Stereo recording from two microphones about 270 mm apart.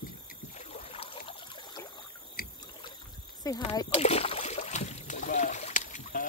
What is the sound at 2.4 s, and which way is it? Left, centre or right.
Boat, left.